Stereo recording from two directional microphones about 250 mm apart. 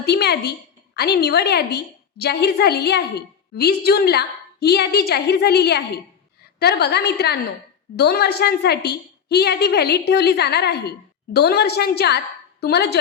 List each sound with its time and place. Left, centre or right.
0.0 s a woman's voice: left